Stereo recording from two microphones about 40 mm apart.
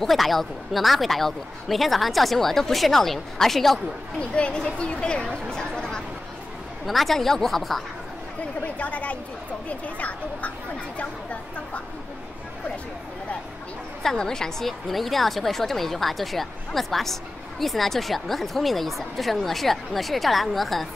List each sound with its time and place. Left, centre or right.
0.0 s a woman's voice: centre
4.2 s speech: left
5.2 s a sound: centre
6.9 s a woman's voice: centre
8.6 s speech: left
14.0 s a woman's voice: centre